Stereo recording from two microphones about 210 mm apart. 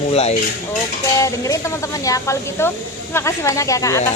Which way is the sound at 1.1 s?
15° left (ahead or behind).